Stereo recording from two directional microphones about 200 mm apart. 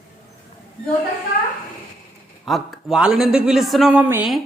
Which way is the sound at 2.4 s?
Centre (ahead or behind).